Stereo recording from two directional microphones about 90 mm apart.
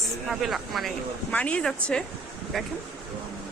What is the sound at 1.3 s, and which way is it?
Speech, 15° left (ahead or behind).